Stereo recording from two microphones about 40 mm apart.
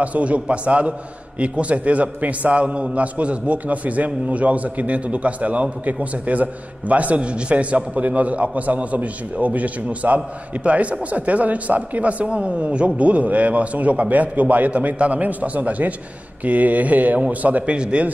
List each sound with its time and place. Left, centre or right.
0.0 s a man's voice: right
17.7 s speech: right